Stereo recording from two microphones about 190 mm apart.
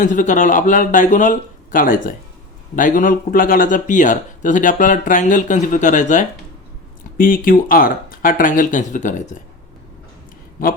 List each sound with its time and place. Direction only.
0.0 s speech: 40° left (ahead or behind)